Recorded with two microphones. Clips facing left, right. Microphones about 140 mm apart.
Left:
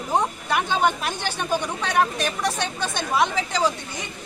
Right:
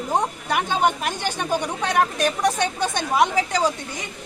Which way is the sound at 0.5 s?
15° right (ahead or behind).